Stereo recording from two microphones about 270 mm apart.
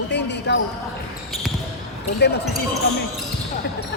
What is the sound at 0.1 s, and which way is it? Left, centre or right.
Basketball bounce, left.